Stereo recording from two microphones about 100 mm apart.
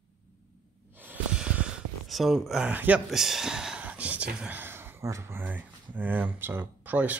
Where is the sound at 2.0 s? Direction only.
Centre (ahead or behind).